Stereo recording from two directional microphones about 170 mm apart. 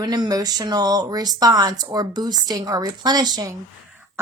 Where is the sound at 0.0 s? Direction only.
25° right (ahead or behind).